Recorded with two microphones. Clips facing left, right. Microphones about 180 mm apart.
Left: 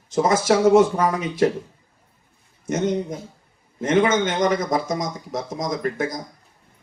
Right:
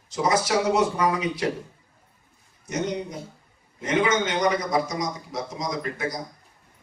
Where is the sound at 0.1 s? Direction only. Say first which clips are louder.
Left 5 dB; 50° left (ahead or behind).